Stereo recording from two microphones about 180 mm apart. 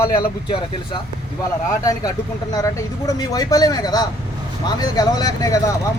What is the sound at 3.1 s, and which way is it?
Speech, 20° left (ahead or behind).